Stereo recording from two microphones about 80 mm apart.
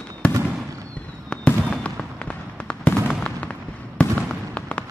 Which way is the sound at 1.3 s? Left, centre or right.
Centre.